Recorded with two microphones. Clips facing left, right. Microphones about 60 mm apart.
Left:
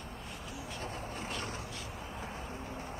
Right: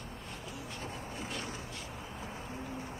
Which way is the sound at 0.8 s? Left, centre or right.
Left.